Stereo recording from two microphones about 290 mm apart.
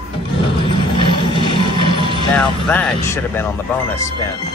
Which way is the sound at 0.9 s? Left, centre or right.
Centre.